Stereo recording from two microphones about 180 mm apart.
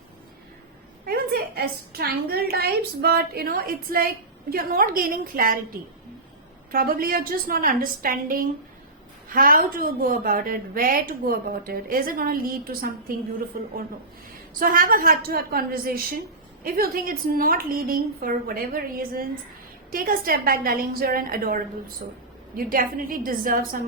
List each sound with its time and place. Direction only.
1.0 s a woman's voice: 60° right (ahead or behind)
6.7 s a woman's voice: 55° right (ahead or behind)
14.6 s a woman's voice: 55° right (ahead or behind)